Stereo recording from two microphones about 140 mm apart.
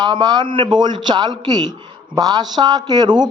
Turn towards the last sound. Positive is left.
turn(degrees=-30)  # may be behind; listen again after turning